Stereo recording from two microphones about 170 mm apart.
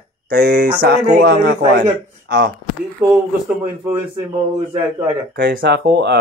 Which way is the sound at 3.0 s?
10° right (ahead or behind).